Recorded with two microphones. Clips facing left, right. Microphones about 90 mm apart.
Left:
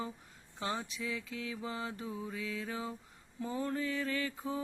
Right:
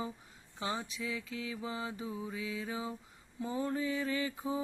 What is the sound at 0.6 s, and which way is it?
Mantra, 5° right (ahead or behind).